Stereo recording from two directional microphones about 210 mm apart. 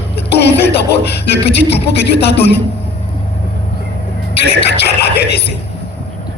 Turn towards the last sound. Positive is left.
turn(degrees=50)  # may be behind; listen again after turning